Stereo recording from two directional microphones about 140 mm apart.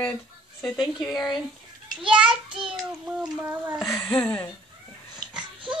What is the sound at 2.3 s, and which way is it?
Child singing, 40° right (ahead or behind).